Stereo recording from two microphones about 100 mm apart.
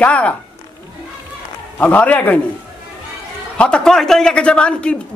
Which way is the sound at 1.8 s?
15° left (ahead or behind).